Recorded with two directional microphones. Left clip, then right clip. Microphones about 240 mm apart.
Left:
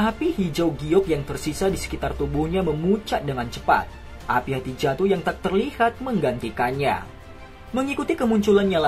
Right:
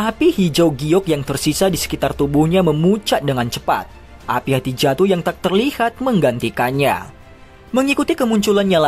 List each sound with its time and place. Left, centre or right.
0.0 s speech: right